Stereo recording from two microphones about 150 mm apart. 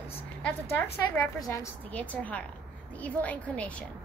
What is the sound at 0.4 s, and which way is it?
Speech, 10° left (ahead or behind).